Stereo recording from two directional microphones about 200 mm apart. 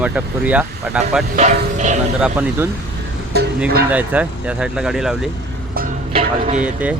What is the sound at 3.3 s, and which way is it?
Speech, 55° right (ahead or behind).